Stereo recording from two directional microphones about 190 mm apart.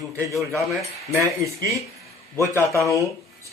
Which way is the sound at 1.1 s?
15° right (ahead or behind).